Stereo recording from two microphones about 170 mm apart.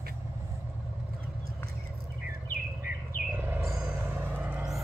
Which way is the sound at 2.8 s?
10° right (ahead or behind).